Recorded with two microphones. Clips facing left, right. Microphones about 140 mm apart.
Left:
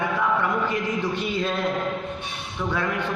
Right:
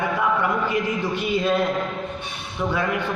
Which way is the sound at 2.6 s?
15° right (ahead or behind).